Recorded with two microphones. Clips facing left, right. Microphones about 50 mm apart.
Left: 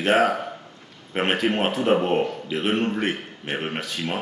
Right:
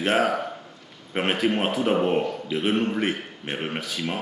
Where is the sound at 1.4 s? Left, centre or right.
Left.